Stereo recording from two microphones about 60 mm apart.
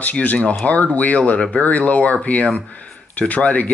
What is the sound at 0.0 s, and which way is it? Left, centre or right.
Speech, left.